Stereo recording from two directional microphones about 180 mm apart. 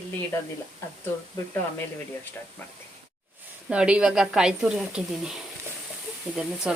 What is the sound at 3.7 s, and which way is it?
Speech, 5° right (ahead or behind).